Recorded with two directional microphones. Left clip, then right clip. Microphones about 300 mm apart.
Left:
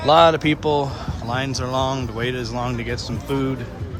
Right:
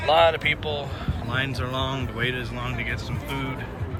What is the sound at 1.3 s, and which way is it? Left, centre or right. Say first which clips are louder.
Speech: left 4 dB; centre.